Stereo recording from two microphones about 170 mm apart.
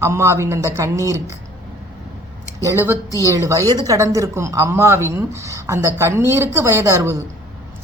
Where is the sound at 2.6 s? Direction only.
15° right (ahead or behind).